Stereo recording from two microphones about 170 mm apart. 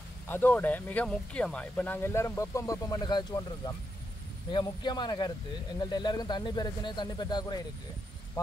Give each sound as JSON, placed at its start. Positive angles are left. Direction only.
{"t": 0.3, "sound": "speech", "side_deg": 10}